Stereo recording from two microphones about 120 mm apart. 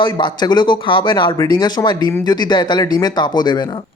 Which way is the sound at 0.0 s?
40° left (ahead or behind).